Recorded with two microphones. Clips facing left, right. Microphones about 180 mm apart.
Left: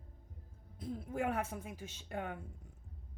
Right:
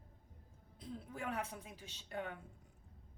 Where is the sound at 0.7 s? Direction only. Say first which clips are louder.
Left 8 dB; 50° left (ahead or behind).